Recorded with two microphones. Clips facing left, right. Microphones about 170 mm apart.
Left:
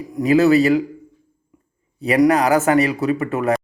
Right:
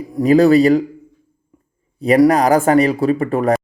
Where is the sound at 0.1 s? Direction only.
35° right (ahead or behind).